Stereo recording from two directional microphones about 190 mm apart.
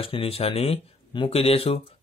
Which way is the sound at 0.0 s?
30° left (ahead or behind).